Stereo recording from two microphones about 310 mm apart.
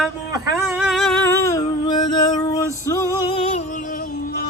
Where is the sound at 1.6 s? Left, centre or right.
Centre.